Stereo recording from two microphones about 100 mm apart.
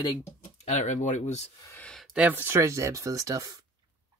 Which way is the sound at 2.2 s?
20° right (ahead or behind).